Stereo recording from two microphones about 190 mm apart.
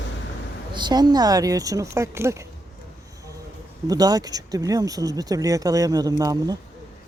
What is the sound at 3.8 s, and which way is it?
Speech, 20° right (ahead or behind).